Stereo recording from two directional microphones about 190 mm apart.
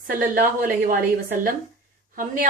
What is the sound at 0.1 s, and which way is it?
Speech, 45° right (ahead or behind).